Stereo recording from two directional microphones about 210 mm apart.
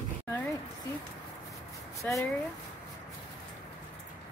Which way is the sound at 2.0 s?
5° left (ahead or behind).